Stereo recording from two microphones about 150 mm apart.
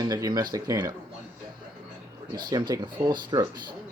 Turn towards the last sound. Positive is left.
turn(degrees=-30)  # may be behind; listen again after turning